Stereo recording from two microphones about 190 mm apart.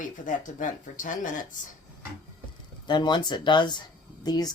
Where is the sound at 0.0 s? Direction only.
45° left (ahead or behind).